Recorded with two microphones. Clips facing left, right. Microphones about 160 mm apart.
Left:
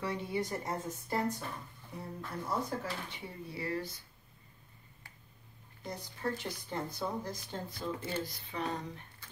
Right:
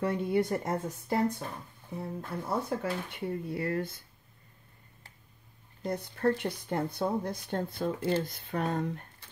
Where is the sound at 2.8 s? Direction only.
55° right (ahead or behind).